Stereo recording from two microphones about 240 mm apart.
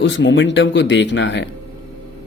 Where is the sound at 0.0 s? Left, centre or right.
Left.